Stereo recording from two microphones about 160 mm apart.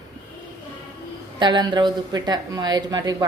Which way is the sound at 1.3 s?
30° right (ahead or behind).